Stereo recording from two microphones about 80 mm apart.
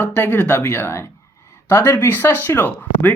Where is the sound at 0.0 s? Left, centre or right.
Left.